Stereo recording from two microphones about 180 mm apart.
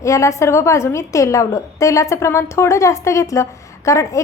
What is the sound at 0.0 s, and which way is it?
A woman's voice, 15° left (ahead or behind).